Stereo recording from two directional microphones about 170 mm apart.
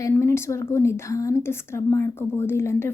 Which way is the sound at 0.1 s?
15° left (ahead or behind).